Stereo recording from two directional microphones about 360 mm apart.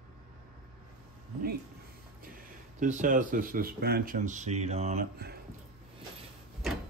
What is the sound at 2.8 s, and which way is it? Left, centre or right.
Speech, right.